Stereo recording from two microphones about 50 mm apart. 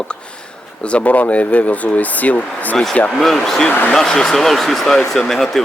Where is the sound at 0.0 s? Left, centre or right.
Centre.